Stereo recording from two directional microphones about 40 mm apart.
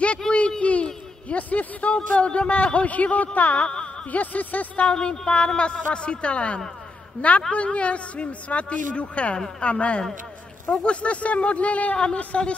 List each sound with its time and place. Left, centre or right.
0.2 s a sound: centre
0.6 s a sound: left
1.3 s music: left
2.0 s a woman's voice: left
3.6 s speech: left
4.1 s a woman's voice: left
4.8 s a woman's voice: centre